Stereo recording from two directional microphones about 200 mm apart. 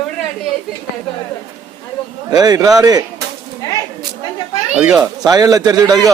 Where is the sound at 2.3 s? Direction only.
20° right (ahead or behind).